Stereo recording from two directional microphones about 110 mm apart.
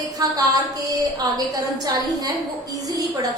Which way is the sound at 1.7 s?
35° right (ahead or behind).